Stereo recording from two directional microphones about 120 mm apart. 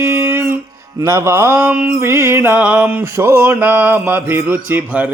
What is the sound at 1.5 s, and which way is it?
Mantra, 10° right (ahead or behind).